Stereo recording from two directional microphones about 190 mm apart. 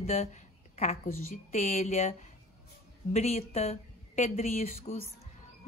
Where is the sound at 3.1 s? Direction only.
35° left (ahead or behind).